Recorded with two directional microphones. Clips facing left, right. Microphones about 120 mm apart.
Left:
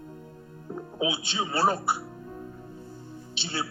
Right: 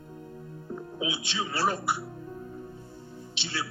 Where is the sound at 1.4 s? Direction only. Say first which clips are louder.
Left 3 dB; 30° left (ahead or behind).